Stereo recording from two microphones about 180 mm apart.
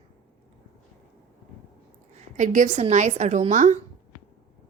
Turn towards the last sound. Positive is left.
turn(degrees=-40)  # may be behind; listen again after turning